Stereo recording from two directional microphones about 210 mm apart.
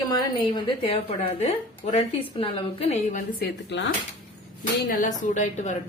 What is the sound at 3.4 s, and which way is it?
Speech, 55° left (ahead or behind).